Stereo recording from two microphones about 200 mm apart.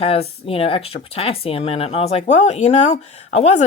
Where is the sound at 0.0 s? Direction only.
30° left (ahead or behind).